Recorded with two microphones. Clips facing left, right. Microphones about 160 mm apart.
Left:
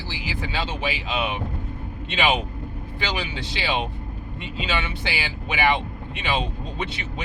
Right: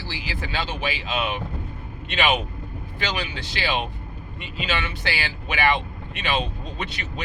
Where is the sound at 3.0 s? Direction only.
20° left (ahead or behind).